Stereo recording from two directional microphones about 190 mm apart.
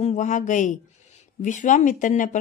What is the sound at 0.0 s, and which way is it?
Speech, 40° left (ahead or behind).